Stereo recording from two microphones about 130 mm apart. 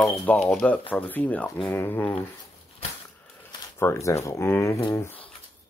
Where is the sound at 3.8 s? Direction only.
20° left (ahead or behind).